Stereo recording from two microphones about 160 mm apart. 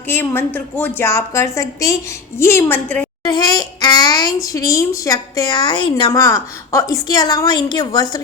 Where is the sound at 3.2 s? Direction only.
25° left (ahead or behind).